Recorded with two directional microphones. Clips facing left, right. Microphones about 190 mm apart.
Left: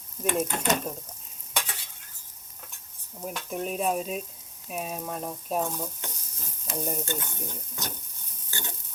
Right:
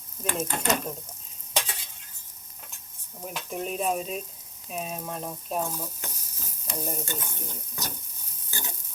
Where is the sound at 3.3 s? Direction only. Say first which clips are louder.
Left 1 dB; centre (ahead or behind).